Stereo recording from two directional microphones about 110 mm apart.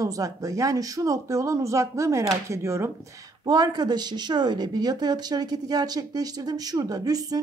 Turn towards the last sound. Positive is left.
turn(degrees=-35)  # may be behind; listen again after turning